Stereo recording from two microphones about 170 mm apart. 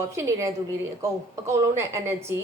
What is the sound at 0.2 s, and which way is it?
A woman's voice, 20° right (ahead or behind).